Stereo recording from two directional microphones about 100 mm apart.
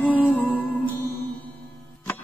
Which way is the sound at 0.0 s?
15° left (ahead or behind).